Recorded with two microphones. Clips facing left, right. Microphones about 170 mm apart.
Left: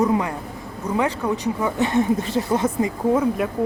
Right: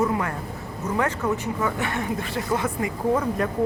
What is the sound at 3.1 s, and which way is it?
Speech, 10° left (ahead or behind).